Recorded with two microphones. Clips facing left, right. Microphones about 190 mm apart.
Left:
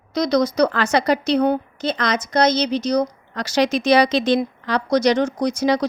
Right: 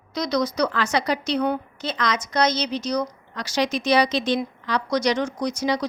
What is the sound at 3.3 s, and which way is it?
A woman's voice, 80° left.